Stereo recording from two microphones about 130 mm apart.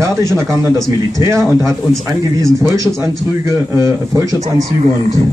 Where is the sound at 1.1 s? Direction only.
20° right (ahead or behind).